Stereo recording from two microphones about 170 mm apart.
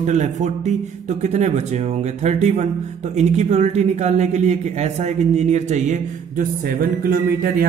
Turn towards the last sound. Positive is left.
turn(degrees=-60)  # may be behind; listen again after turning